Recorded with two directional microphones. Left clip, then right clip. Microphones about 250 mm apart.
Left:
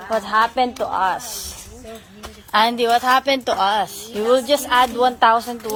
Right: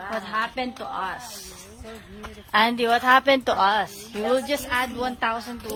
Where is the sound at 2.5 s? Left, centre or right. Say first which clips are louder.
Left 4 dB; centre.